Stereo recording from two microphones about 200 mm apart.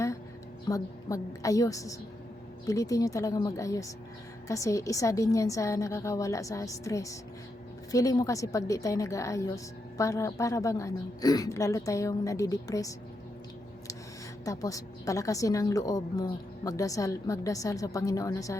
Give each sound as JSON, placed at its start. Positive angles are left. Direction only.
{"t": 0.7, "sound": "a woman's voice", "side_deg": 15}
{"t": 14.4, "sound": "a woman's voice", "side_deg": 15}